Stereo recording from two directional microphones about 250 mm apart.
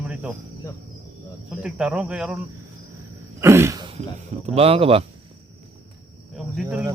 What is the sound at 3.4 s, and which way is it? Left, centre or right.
Throat clearing, centre.